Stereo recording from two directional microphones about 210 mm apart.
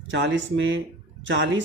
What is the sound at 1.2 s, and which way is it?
Speech, 60° right (ahead or behind).